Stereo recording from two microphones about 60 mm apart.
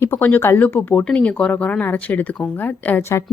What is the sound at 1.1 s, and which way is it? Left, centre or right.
Speech, left.